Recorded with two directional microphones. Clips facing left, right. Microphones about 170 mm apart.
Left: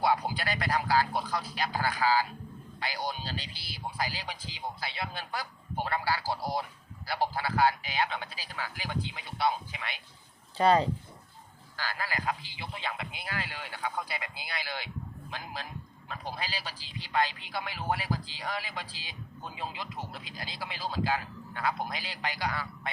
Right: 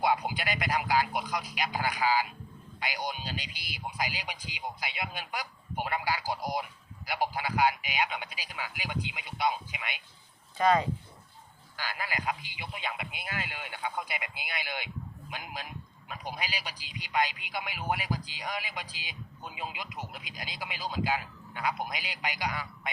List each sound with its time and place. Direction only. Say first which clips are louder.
0.0 s speech: even; 20° right (ahead or behind)
10.6 s speech: left 2 dB; 30° left (ahead or behind)
11.8 s speech: left 1 dB; 20° right (ahead or behind)